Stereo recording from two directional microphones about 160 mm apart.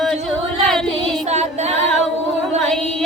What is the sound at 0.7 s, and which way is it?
Child singing, centre (ahead or behind).